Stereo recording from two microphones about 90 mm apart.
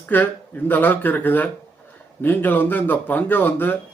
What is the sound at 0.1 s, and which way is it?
Speech, 20° left (ahead or behind).